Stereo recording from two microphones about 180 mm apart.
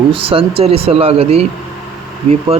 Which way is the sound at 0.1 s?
30° right (ahead or behind).